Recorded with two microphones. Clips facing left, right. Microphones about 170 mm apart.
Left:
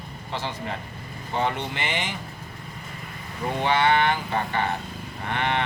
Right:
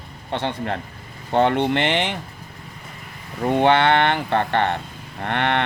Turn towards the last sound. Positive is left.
turn(degrees=-65)  # may be behind; listen again after turning